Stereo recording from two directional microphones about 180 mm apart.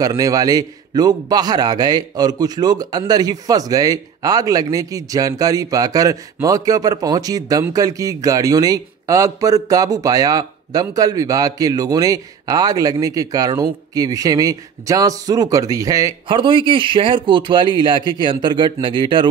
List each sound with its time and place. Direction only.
0.0 s a man's voice: 20° right (ahead or behind)